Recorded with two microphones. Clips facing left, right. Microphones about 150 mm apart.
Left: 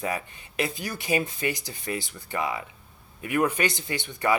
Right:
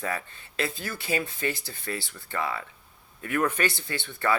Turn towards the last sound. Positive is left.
turn(degrees=15)  # may be behind; listen again after turning